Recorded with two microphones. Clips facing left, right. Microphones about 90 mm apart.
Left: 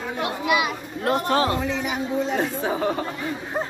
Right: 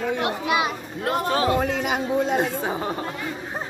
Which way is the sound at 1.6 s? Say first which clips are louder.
Right 2 dB; 60° right (ahead or behind).